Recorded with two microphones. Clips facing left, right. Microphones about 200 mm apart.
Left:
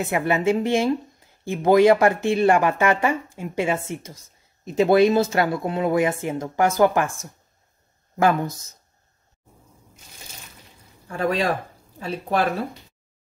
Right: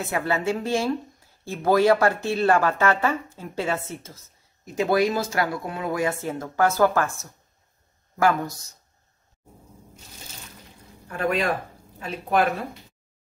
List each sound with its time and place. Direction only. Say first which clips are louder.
0.0 s speech: left 4 dB; 15° left (ahead or behind)
11.1 s speech: left 2 dB; 30° left (ahead or behind)